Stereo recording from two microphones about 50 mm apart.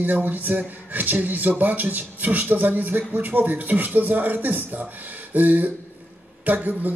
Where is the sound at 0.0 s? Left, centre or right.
Right.